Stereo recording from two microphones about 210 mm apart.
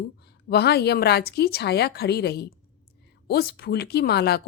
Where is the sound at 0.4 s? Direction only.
50° left (ahead or behind).